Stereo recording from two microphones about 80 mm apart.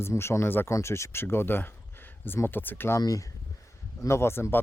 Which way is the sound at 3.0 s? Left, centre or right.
Left.